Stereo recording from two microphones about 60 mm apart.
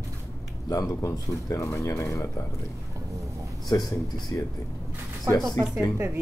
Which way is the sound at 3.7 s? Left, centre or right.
Left.